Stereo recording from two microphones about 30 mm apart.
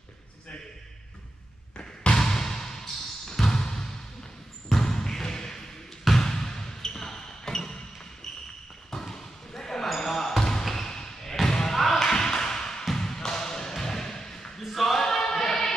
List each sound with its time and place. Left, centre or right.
2.1 s basketball bounce: centre
9.0 s basketball bounce: centre
11.4 s slam: centre
12.0 s a sound: centre
14.8 s choir: centre